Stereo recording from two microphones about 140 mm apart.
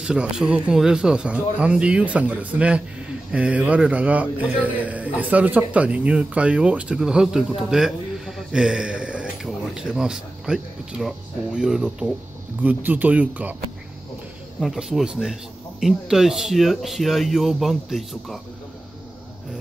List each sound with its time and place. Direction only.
0.0 s speech: 5° right (ahead or behind)
14.6 s speech: 5° right (ahead or behind)